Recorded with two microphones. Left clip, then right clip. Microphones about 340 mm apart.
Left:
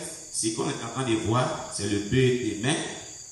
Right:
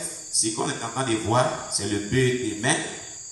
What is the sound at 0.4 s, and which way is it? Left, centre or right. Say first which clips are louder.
Speech: right 2 dB; centre.